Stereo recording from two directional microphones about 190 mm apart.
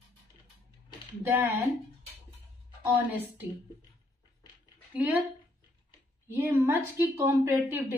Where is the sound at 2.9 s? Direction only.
10° right (ahead or behind).